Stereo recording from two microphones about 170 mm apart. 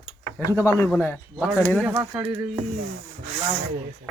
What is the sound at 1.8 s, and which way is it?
Speech, 10° right (ahead or behind).